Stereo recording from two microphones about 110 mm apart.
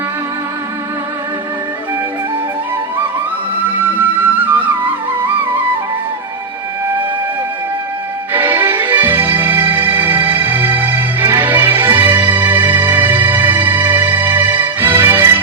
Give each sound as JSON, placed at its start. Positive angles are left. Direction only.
{"t": 3.8, "sound": "flute", "side_deg": -15}
{"t": 8.3, "sound": "music", "side_deg": -20}